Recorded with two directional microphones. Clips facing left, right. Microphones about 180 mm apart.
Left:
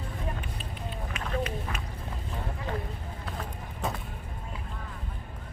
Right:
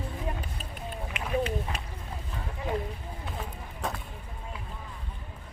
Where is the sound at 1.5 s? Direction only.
30° right (ahead or behind).